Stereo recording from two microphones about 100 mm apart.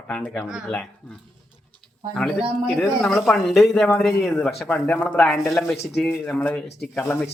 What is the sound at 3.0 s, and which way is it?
Child singing, 5° left (ahead or behind).